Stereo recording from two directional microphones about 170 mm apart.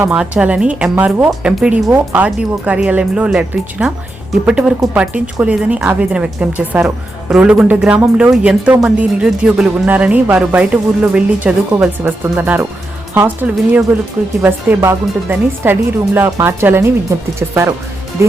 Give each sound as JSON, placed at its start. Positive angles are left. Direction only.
{"t": 0.0, "sound": "a woman's voice", "side_deg": -5}